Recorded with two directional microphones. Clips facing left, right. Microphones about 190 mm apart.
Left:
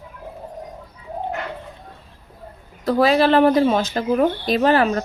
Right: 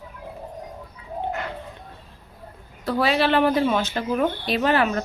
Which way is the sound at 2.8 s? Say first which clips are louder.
Left 5 dB; 40° left (ahead or behind).